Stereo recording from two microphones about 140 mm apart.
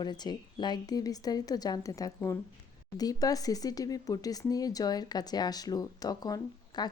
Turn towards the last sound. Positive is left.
turn(degrees=30)  # may be behind; listen again after turning